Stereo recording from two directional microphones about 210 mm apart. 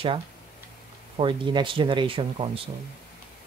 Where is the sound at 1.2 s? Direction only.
25° right (ahead or behind).